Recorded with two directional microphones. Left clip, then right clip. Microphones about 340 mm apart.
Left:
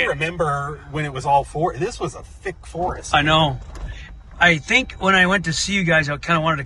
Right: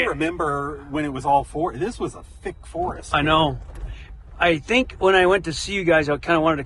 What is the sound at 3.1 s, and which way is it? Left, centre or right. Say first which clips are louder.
Speech: left 2 dB; centre.